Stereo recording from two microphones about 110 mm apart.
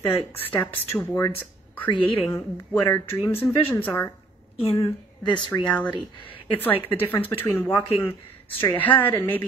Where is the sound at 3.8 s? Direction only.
15° left (ahead or behind).